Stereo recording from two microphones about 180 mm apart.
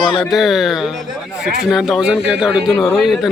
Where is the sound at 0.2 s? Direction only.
Centre (ahead or behind).